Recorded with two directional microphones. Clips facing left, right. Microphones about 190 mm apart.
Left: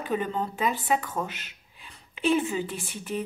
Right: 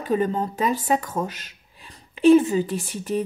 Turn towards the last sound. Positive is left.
turn(degrees=-40)  # may be behind; listen again after turning